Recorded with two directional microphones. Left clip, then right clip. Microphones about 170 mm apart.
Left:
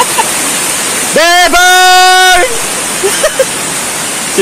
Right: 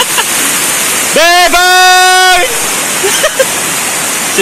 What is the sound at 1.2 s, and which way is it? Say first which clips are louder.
Speech: even; 30° left (ahead or behind).